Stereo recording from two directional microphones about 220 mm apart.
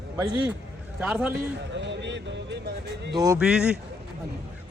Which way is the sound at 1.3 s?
50° right (ahead or behind).